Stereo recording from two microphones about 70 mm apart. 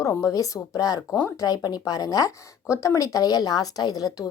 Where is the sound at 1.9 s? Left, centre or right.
Left.